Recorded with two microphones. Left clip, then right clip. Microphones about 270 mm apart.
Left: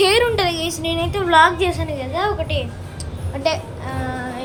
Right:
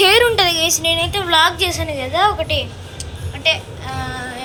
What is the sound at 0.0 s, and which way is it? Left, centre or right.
A woman's voice, centre.